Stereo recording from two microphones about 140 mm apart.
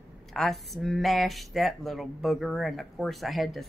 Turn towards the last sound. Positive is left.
turn(degrees=0)  # may be behind; listen again after turning